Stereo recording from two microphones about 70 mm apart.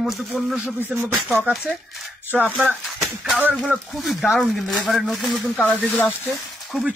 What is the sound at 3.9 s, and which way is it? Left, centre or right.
Speech, centre.